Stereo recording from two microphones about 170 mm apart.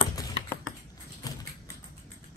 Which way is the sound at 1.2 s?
20° left (ahead or behind).